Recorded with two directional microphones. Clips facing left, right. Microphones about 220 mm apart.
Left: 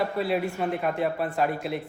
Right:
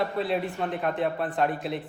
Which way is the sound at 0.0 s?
Centre (ahead or behind).